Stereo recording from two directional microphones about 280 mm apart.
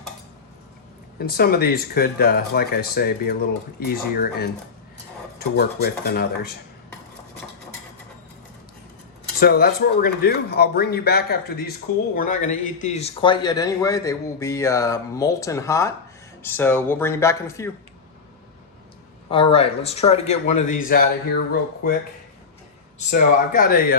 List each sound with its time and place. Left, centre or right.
1.2 s speech: left
9.4 s speech: left; by 17.7 s centre
19.3 s a man's voice: centre
23.0 s speech: left